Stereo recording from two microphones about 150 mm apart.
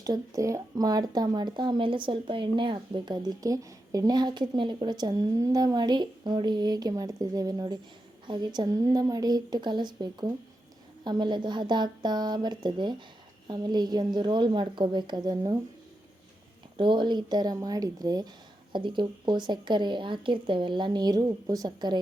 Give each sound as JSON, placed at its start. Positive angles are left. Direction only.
{"t": 0.0, "sound": "speech", "side_deg": -25}
{"t": 16.7, "sound": "speech", "side_deg": -30}